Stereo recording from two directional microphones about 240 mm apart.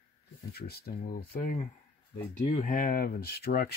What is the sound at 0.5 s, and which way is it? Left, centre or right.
Speech, left.